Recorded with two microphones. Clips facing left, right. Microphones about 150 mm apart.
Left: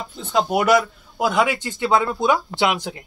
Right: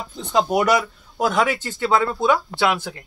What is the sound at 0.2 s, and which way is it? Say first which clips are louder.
Speech: right 1 dB; 5° left (ahead or behind).